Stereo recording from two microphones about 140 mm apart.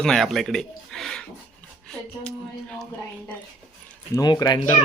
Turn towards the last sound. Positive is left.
turn(degrees=30)  # may be behind; listen again after turning